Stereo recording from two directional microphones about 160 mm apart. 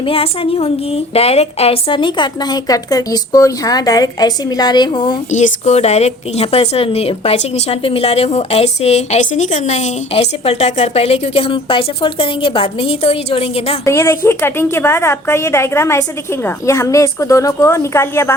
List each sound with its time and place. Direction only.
0.0 s a woman's voice: 35° left (ahead or behind)
5.3 s a woman's voice: 45° left (ahead or behind)
13.8 s a woman's voice: 15° left (ahead or behind)